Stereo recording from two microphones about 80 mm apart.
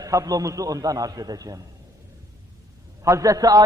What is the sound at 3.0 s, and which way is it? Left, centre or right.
Speech, right.